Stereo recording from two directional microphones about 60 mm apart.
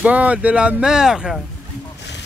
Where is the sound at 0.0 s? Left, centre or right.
Right.